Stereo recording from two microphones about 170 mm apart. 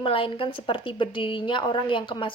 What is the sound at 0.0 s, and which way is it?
A woman's voice, 30° left (ahead or behind).